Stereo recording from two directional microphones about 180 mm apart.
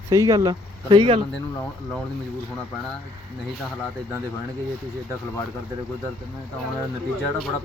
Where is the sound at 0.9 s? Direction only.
30° right (ahead or behind).